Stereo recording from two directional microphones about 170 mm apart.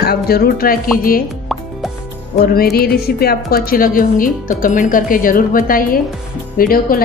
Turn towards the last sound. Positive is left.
turn(degrees=60)  # may be behind; listen again after turning